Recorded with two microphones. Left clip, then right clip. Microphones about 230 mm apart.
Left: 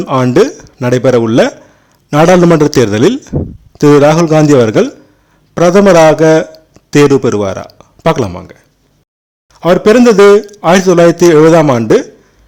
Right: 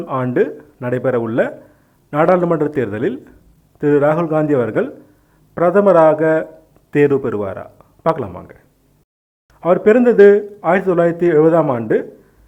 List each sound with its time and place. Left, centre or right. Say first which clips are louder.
0.0 s a man's voice: left 9 dB; left